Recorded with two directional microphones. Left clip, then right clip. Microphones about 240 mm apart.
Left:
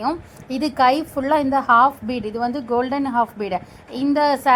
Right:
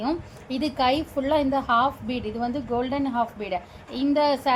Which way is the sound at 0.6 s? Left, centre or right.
Left.